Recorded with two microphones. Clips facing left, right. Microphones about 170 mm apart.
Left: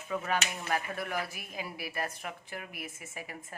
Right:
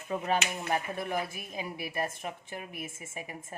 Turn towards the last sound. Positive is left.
turn(degrees=-20)  # may be behind; listen again after turning